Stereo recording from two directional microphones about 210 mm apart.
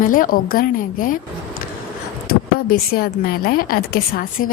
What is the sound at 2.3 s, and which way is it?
A woman's voice, 45° left (ahead or behind).